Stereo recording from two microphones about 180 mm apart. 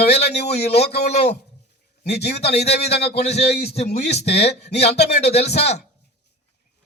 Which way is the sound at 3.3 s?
35° left (ahead or behind).